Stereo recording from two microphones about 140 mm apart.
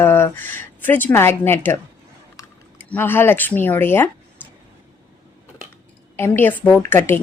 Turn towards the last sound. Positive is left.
turn(degrees=15)  # may be behind; listen again after turning